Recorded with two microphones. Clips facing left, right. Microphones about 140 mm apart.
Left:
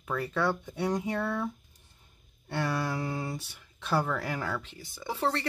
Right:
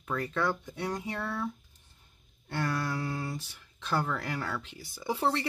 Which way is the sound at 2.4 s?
5° left (ahead or behind).